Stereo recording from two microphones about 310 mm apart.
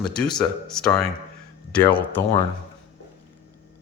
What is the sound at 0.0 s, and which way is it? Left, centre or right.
Speech, centre.